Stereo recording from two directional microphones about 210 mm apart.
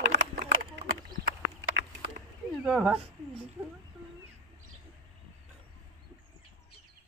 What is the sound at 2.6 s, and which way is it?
Speech, 5° right (ahead or behind).